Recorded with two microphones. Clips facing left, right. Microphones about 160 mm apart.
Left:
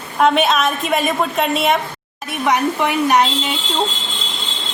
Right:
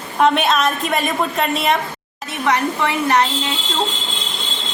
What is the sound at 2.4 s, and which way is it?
Speech, 15° left (ahead or behind).